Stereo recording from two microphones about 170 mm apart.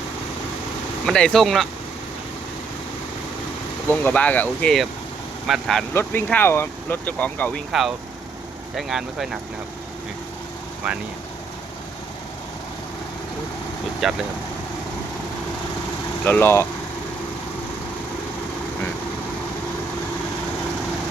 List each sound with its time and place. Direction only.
1.0 s speech: 5° left (ahead or behind)
3.8 s speech: 10° left (ahead or behind)
5.9 s speech: 15° left (ahead or behind)
14.0 s speech: centre (ahead or behind)
16.2 s speech: 10° left (ahead or behind)